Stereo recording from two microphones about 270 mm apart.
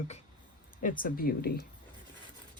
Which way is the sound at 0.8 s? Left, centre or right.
Left.